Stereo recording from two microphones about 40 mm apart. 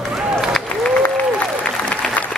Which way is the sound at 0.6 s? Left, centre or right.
Left.